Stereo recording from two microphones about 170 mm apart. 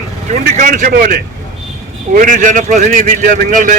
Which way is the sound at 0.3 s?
45° right (ahead or behind).